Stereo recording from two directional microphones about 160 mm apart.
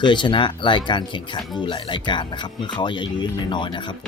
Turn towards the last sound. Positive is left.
turn(degrees=30)  # may be behind; listen again after turning